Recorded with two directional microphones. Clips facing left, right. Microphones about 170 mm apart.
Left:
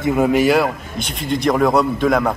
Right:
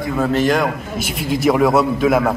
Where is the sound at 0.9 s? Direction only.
5° right (ahead or behind).